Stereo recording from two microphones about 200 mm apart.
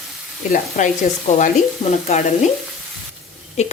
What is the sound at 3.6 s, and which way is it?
Speech, 35° left (ahead or behind).